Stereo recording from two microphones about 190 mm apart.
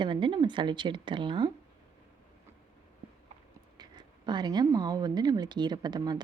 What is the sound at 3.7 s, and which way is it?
Speech, 20° right (ahead or behind).